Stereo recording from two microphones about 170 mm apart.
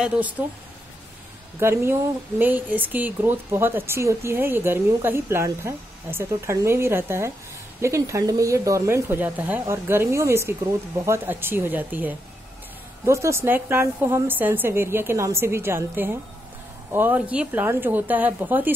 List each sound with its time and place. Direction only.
0.4 s speech: 10° right (ahead or behind)
1.6 s speech: 15° right (ahead or behind)